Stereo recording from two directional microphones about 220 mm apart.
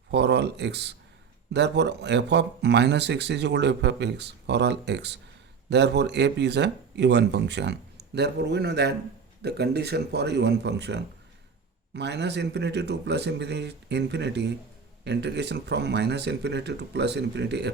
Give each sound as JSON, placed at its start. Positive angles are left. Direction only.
{"t": 0.1, "sound": "speech", "side_deg": -50}